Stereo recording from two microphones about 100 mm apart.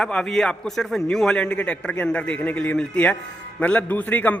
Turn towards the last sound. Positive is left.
turn(degrees=15)  # may be behind; listen again after turning